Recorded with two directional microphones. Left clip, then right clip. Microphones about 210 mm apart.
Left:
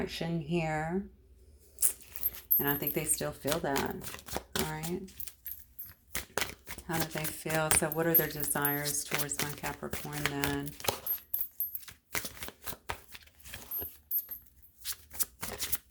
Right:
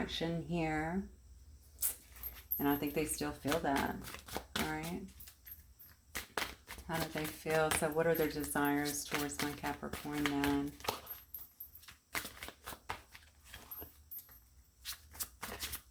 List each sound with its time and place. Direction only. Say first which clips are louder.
0.2 s speech: left 3 dB; 30° left (ahead or behind)
6.1 s a sound: left 5 dB; 45° left (ahead or behind)
7.5 s speech: left 2 dB; 40° left (ahead or behind)
11.9 s shuffling cards: left 3 dB; 50° left (ahead or behind)